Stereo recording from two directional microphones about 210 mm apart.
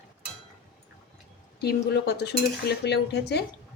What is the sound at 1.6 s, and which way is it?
Cutlery, 50° left (ahead or behind).